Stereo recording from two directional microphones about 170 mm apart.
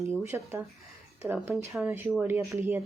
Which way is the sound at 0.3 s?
15° right (ahead or behind).